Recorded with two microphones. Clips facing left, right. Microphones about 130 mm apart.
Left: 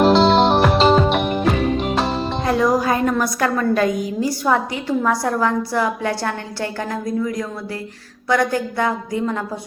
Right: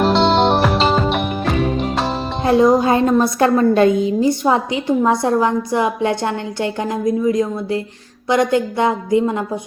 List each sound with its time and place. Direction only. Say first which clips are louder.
0.0 s music: left 1 dB; centre (ahead or behind)
2.4 s a woman's voice: right 6 dB; 25° right (ahead or behind)